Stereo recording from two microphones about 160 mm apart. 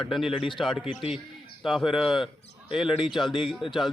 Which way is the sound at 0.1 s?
Centre (ahead or behind).